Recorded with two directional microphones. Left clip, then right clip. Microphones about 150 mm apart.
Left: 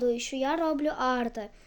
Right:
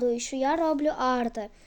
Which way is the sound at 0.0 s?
25° right (ahead or behind).